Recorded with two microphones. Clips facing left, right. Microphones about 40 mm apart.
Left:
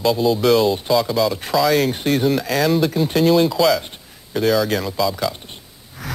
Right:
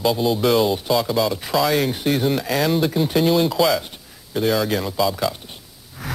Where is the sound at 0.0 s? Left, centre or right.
Centre.